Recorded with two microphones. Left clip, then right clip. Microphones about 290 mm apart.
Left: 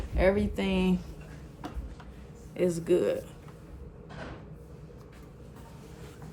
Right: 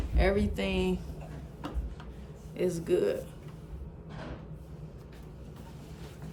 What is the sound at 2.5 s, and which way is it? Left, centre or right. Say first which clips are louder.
Speech: left 2 dB; left.